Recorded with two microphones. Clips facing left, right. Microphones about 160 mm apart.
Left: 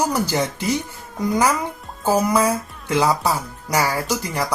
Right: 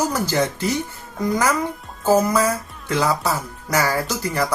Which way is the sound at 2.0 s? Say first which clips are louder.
Right 1 dB; 15° left (ahead or behind).